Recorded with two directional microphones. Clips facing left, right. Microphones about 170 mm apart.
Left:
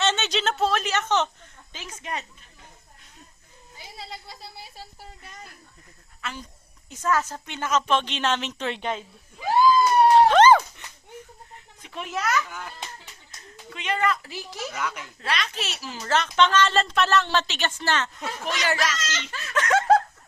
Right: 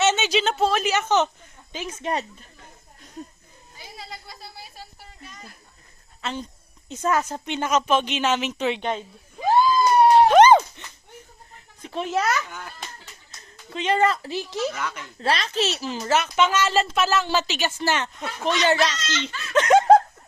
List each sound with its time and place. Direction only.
0.0 s a sound: 5° right (ahead or behind)
1.7 s a child's voice: 20° right (ahead or behind)
3.8 s speech: 25° left (ahead or behind)
6.2 s a woman's voice: 25° right (ahead or behind); by 8.9 s 5° right (ahead or behind)
9.7 s a sound: 25° right (ahead or behind)
10.2 s a sound: 15° right (ahead or behind)
11.8 s a child's voice: 30° right (ahead or behind)
12.5 s speech: 5° left (ahead or behind)
13.7 s speech: 30° right (ahead or behind)
14.8 s speech: 10° left (ahead or behind)
15.2 s speech: 35° right (ahead or behind)
16.0 s speech: 10° right (ahead or behind)
18.4 s a child's voice: 25° right (ahead or behind)